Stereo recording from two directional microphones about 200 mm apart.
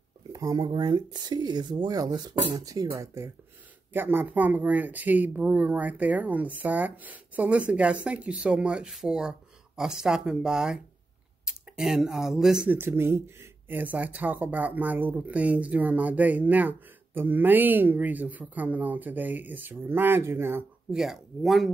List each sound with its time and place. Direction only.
0.3 s speech: 15° right (ahead or behind); by 21.6 s centre (ahead or behind)